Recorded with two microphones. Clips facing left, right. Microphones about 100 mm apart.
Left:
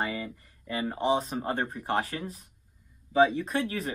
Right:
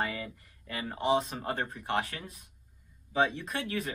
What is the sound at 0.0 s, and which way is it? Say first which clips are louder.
Speech: left 2 dB; 25° left (ahead or behind).